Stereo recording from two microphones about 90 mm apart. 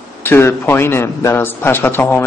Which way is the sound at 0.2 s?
25° left (ahead or behind).